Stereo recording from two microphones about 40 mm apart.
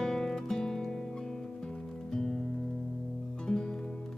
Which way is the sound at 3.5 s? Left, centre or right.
Centre.